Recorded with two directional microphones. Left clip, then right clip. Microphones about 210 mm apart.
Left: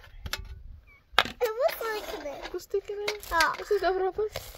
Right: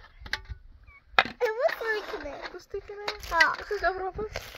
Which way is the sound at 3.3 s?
5° left (ahead or behind).